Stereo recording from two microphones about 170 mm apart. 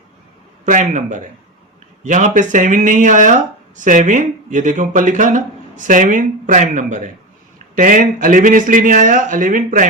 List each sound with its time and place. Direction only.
0.6 s speech: 45° right (ahead or behind)